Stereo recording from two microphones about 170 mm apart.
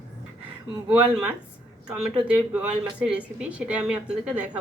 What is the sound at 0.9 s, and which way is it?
Speech, 5° right (ahead or behind).